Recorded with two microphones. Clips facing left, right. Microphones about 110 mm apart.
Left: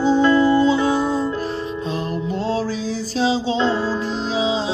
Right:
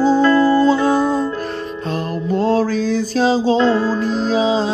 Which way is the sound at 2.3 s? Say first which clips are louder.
Right 8 dB; 50° right (ahead or behind).